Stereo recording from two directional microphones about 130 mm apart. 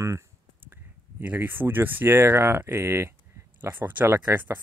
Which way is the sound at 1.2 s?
15° right (ahead or behind).